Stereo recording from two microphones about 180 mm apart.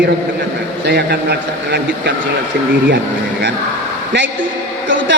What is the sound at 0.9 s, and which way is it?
A man's voice, 65° right (ahead or behind).